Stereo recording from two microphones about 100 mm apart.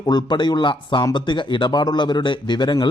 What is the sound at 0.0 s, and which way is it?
A man's voice, 45° left (ahead or behind).